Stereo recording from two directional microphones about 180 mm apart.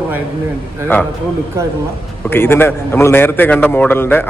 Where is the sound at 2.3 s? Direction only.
10° left (ahead or behind).